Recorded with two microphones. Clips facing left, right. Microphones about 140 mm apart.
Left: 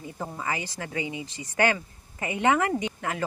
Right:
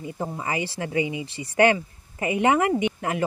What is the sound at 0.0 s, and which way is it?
Speech, 25° right (ahead or behind).